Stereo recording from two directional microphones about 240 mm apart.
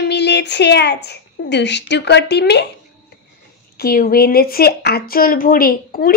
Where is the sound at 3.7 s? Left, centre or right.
Left.